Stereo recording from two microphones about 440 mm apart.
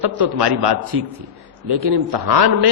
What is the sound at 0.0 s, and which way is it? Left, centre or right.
A man's voice, right.